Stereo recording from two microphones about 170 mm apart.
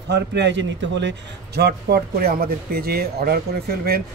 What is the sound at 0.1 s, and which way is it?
A man's voice, 85° right.